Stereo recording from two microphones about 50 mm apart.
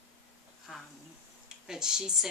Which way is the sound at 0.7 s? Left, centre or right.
Centre.